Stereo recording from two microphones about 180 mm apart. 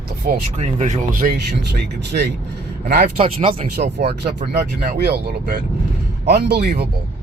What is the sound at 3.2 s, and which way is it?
Speech, 30° right (ahead or behind).